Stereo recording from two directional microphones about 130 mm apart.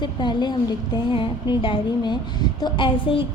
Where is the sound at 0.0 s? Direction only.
35° left (ahead or behind).